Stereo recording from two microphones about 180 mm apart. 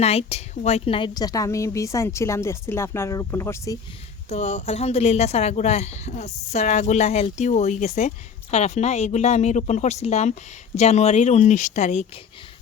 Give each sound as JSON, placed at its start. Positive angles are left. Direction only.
{"t": 0.0, "sound": "a woman's voice", "side_deg": 35}
{"t": 4.3, "sound": "speech", "side_deg": 35}